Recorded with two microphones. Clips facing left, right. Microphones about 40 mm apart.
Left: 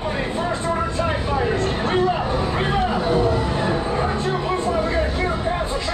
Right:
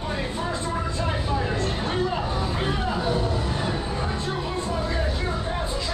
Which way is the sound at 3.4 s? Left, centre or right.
Left.